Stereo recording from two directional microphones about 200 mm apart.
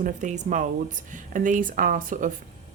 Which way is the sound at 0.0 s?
35° right (ahead or behind).